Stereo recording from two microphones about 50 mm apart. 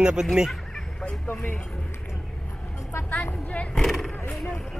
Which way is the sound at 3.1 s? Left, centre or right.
Left.